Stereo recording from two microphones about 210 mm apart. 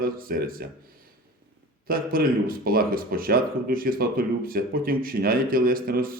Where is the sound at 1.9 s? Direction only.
45° right (ahead or behind).